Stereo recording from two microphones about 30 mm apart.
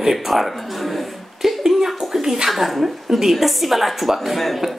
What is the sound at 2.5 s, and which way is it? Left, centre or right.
A woman's voice, centre.